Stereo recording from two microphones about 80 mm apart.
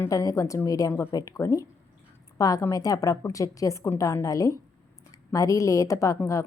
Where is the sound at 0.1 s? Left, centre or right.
Left.